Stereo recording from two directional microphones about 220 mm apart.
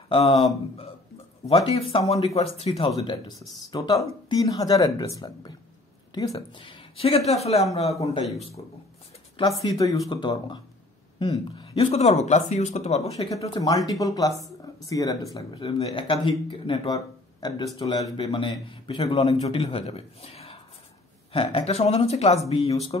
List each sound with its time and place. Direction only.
0.1 s speech: 30° left (ahead or behind)
0.4 s speech: 20° left (ahead or behind)
9.6 s speech: 15° left (ahead or behind)
13.3 s speech: 15° left (ahead or behind)